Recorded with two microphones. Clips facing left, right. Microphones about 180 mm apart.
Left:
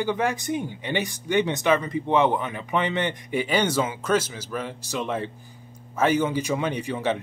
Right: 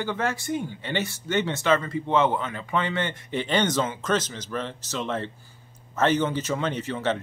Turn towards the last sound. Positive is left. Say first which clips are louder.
# left 1 dB
turn(degrees=10)  # may be behind; listen again after turning